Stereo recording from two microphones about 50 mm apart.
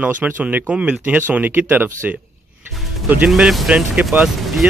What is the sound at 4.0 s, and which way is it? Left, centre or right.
Speech, right.